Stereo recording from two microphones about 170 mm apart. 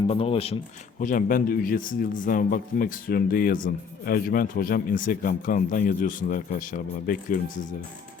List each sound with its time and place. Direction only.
0.1 s speech: 35° left (ahead or behind)
0.9 s a man's voice: 50° left (ahead or behind)